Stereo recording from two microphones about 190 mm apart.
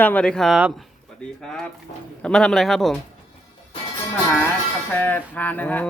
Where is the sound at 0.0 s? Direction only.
5° left (ahead or behind).